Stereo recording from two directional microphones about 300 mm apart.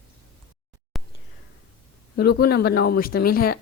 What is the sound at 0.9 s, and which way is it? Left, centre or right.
Whispering, centre.